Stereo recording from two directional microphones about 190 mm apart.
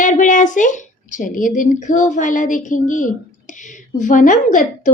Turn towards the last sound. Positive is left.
turn(degrees=45)  # may be behind; listen again after turning